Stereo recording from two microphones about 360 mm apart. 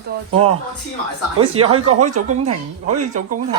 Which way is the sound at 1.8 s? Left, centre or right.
Right.